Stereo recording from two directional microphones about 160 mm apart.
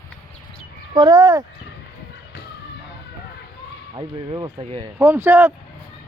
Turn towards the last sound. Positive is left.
turn(degrees=-10)  # may be behind; listen again after turning